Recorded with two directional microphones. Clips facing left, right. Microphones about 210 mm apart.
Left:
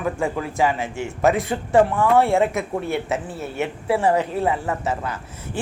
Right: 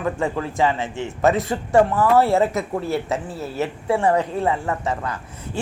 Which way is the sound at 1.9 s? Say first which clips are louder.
Right 1 dB; 5° right (ahead or behind).